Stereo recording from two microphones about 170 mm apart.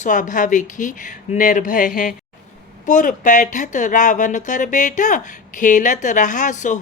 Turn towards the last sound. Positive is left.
turn(degrees=45)  # may be behind; listen again after turning